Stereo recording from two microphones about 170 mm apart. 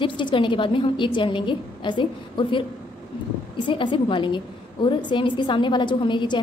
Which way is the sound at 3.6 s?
30° left (ahead or behind).